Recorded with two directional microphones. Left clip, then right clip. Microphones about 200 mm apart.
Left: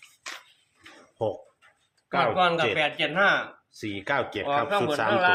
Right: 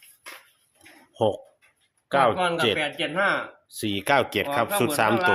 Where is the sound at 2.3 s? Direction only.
15° left (ahead or behind).